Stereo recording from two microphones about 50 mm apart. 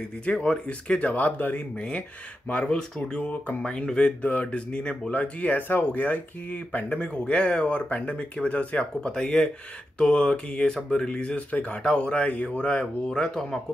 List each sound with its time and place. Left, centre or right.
0.2 s speech: left
4.2 s speech: left; by 13.6 s centre